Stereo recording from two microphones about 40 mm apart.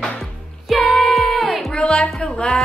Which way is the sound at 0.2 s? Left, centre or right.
Centre.